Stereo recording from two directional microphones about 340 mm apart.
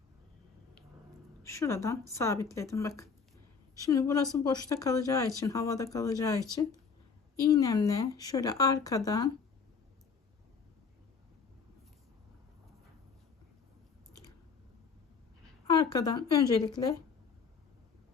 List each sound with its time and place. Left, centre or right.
1.5 s speech: centre
3.8 s speech: centre
7.4 s speech: centre
15.6 s a woman's voice: centre